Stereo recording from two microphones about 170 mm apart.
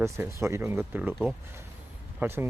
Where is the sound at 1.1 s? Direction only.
Centre (ahead or behind).